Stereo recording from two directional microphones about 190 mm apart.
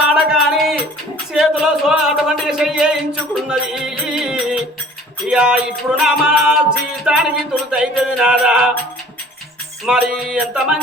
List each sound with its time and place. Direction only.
0.1 s music: centre (ahead or behind)
1.3 s speech: 5° right (ahead or behind)
5.3 s music: 5° right (ahead or behind)
9.8 s music: 5° right (ahead or behind)